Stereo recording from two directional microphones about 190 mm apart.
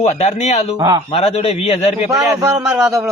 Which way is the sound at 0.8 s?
25° right (ahead or behind).